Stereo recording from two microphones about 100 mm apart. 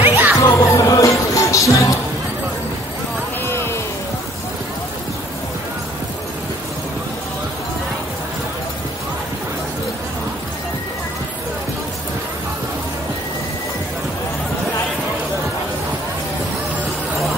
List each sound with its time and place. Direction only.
0.0 s music: 20° right (ahead or behind)
0.4 s music: 35° left (ahead or behind)
3.4 s a sound: 25° left (ahead or behind)